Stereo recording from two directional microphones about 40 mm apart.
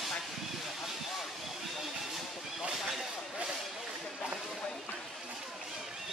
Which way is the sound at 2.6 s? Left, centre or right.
Centre.